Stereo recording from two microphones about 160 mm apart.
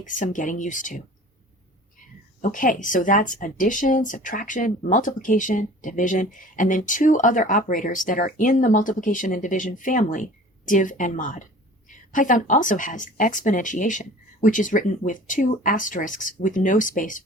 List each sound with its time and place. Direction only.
0.0 s speech: 55° left (ahead or behind)
2.4 s speech: 55° left (ahead or behind)